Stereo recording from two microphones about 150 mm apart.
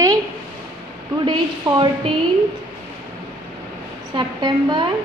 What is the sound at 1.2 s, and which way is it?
Speech, 30° right (ahead or behind).